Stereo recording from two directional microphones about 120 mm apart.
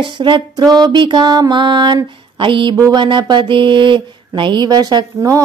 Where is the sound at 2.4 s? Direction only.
40° right (ahead or behind).